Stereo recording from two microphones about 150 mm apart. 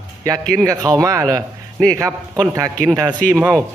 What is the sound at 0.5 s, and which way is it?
A man's voice, 20° right (ahead or behind).